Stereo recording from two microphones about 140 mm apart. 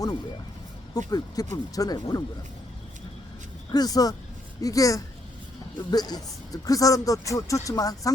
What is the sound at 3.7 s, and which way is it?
Speech, 25° left (ahead or behind).